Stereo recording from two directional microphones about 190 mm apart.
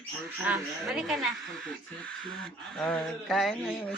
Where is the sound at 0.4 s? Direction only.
5° right (ahead or behind).